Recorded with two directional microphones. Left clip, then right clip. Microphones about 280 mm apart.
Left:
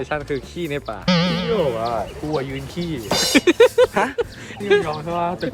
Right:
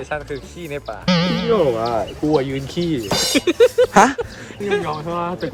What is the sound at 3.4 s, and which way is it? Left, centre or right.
Speech, left.